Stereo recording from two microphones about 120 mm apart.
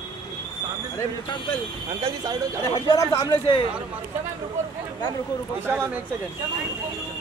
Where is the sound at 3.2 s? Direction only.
40° left (ahead or behind).